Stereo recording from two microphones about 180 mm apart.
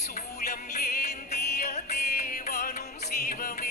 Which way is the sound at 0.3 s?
60° left (ahead or behind).